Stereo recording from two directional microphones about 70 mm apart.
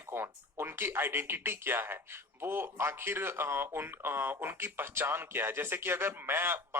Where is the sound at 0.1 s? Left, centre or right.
Right.